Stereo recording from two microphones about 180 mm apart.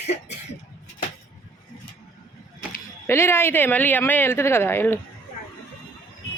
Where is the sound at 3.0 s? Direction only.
15° left (ahead or behind).